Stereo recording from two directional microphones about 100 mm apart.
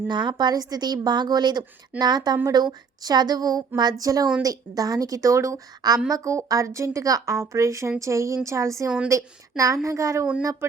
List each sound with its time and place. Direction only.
0.1 s a woman's voice: 45° right (ahead or behind); by 10.7 s 30° right (ahead or behind)